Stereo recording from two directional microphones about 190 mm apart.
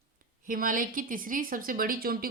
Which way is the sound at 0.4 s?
45° right (ahead or behind).